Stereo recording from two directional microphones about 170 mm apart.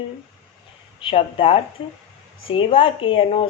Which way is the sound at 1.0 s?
35° left (ahead or behind).